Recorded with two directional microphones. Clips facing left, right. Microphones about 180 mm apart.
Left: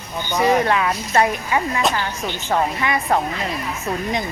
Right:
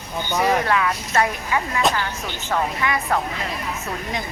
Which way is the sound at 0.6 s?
25° left (ahead or behind).